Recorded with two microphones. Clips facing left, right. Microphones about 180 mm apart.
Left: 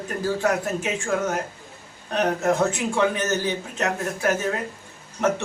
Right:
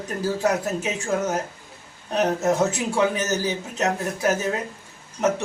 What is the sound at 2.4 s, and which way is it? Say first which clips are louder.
Speech: even; 20° right (ahead or behind).